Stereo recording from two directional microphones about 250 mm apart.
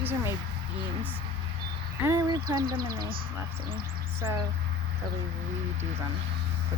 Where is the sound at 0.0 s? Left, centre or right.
Centre.